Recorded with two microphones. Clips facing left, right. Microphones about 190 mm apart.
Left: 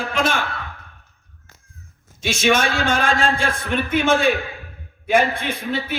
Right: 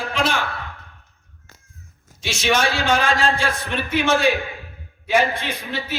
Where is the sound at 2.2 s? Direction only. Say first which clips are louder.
Left 2 dB; 50° left (ahead or behind).